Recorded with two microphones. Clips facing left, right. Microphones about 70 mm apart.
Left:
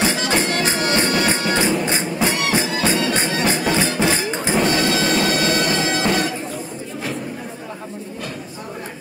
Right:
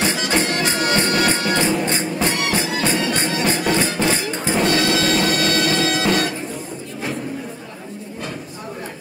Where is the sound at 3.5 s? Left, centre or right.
Centre.